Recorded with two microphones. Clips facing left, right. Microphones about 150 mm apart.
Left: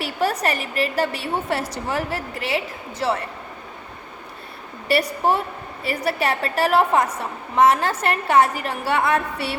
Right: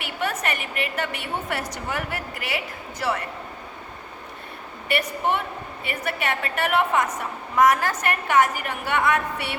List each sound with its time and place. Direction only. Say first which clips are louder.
0.0 s a woman's voice: left 5 dB; 35° left (ahead or behind)
4.9 s a woman's voice: left 4 dB; 35° left (ahead or behind)